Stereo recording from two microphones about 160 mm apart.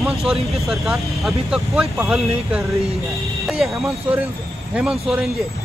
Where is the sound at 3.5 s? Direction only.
Centre (ahead or behind).